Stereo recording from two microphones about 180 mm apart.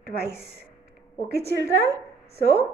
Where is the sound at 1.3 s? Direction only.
60° right (ahead or behind).